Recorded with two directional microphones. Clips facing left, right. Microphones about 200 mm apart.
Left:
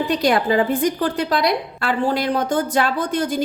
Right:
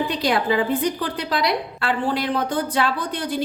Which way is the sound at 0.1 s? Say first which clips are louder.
Left 3 dB; 45° left (ahead or behind).